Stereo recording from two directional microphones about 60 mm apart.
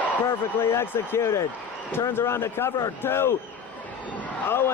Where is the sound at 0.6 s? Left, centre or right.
Left.